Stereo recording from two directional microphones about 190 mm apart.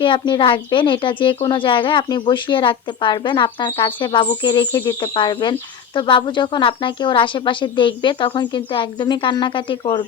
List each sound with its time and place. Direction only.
0.0 s speech: 25° left (ahead or behind)